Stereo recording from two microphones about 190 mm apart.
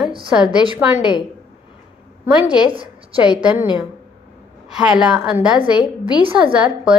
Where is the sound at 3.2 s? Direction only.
10° right (ahead or behind).